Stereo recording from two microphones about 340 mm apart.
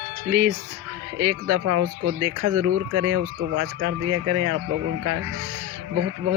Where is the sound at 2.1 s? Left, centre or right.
Right.